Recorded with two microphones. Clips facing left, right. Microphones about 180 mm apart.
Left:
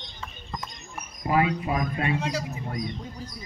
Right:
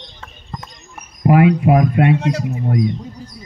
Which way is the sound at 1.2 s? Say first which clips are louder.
Right 11 dB; 70° right (ahead or behind).